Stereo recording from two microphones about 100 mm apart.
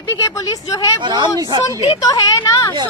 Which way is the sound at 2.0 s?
35° left (ahead or behind).